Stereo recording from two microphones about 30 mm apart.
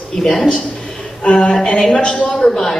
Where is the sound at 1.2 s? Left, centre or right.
Left.